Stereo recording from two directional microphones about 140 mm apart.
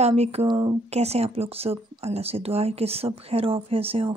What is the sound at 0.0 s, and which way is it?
Speech, 50° right (ahead or behind).